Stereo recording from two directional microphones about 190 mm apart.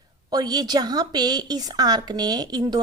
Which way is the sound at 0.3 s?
20° right (ahead or behind).